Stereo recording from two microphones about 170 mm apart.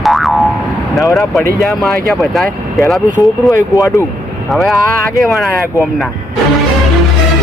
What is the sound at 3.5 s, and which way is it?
Speech, 20° left (ahead or behind).